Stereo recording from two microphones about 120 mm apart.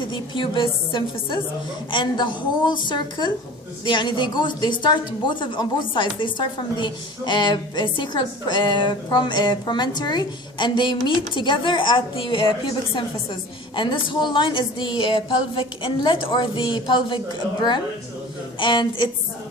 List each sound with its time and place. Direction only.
0.1 s speech: 45° left (ahead or behind)
18.6 s speech: 40° left (ahead or behind)